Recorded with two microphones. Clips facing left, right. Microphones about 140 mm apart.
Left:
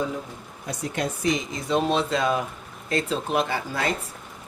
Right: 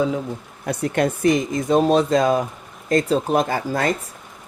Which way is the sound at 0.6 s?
60° right (ahead or behind).